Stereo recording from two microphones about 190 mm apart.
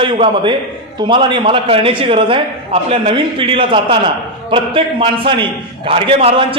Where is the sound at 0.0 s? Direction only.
25° right (ahead or behind).